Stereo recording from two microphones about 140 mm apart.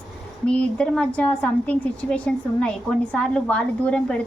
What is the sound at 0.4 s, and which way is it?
A woman's voice, 10° left (ahead or behind).